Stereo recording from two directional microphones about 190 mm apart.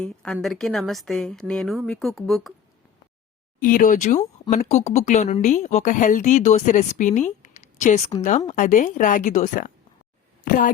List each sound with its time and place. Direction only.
0.0 s a woman's voice: 5° left (ahead or behind)
3.6 s a woman's voice: 45° left (ahead or behind)